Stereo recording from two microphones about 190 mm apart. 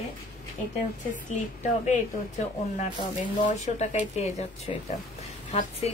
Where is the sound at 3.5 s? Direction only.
35° left (ahead or behind).